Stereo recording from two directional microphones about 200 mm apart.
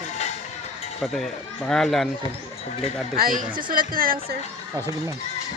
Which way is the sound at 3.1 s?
45° right (ahead or behind).